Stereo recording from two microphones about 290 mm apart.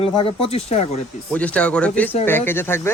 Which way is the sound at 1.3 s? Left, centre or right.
Centre.